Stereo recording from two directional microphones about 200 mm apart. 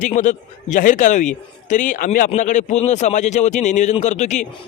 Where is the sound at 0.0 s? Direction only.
40° left (ahead or behind).